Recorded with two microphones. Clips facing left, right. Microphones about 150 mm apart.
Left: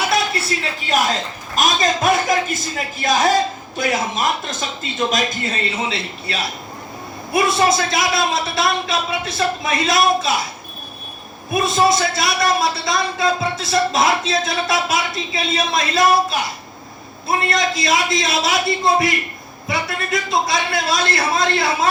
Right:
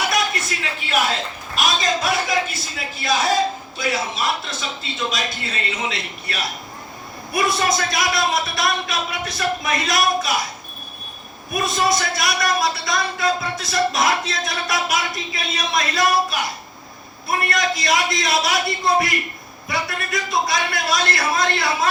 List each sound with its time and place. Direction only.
0.1 s a sound: 35° left (ahead or behind)
1.5 s speech: 50° left (ahead or behind)
5.9 s a man's voice: 25° left (ahead or behind)
11.5 s a man's voice: 25° left (ahead or behind)